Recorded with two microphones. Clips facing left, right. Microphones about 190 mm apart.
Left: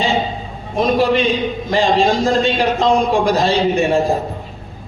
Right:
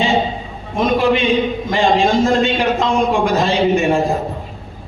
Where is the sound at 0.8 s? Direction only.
35° left (ahead or behind).